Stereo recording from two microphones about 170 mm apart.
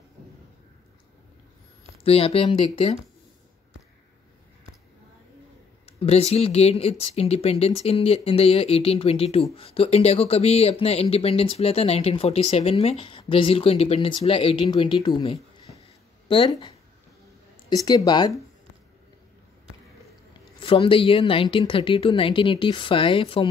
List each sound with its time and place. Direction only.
2.0 s speech: 35° left (ahead or behind)
5.9 s speech: 35° left (ahead or behind)
17.8 s speech: 25° left (ahead or behind)
20.6 s speech: 30° left (ahead or behind)